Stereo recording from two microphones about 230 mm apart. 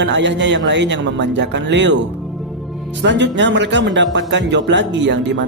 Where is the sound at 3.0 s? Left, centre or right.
Right.